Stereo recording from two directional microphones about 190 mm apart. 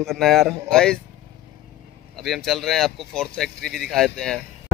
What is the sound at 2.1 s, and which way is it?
Speech, centre (ahead or behind).